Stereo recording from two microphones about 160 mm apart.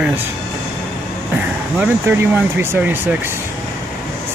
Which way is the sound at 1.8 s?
15° right (ahead or behind).